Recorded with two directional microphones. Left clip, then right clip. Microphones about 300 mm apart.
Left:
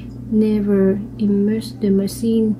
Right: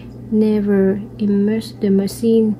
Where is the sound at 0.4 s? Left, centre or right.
Right.